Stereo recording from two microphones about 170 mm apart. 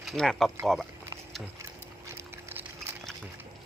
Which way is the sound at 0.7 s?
Centre (ahead or behind).